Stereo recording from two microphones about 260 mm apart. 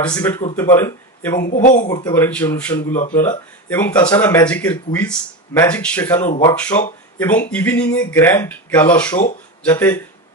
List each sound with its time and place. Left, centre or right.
0.1 s speech: centre
1.4 s speech: left
1.9 s speech: centre